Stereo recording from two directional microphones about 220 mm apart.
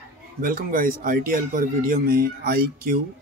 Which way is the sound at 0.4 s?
40° right (ahead or behind).